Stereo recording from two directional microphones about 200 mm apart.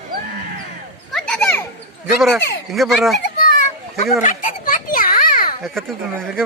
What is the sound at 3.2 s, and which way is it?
Children playing, 45° left (ahead or behind).